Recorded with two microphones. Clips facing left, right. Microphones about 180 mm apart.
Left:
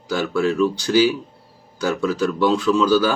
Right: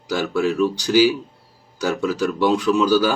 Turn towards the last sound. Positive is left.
turn(degrees=-15)  # may be behind; listen again after turning